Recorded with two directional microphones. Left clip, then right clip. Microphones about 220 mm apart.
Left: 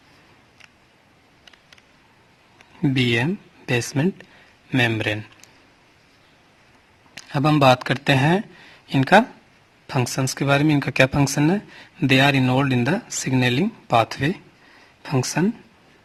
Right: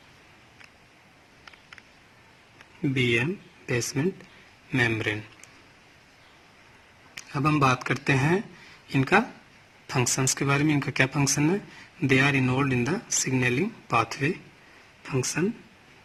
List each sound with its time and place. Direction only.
2.8 s speech: 55° left (ahead or behind)
7.3 s speech: 55° left (ahead or behind)
9.9 s speech: 35° left (ahead or behind)
10.2 s speech: 45° left (ahead or behind)